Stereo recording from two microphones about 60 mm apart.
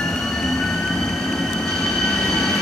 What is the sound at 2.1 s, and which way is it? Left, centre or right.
Train, centre.